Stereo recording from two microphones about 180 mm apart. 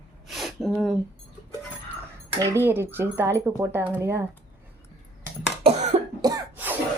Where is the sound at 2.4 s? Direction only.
15° right (ahead or behind).